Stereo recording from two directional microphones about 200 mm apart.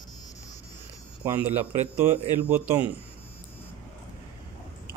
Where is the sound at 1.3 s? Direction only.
10° right (ahead or behind).